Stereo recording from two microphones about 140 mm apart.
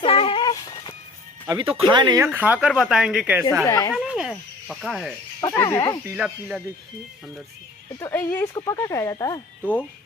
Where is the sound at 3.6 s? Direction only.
25° left (ahead or behind).